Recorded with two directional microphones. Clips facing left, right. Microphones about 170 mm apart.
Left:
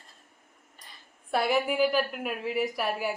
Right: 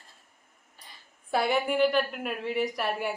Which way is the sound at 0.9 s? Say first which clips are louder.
Even; centre (ahead or behind).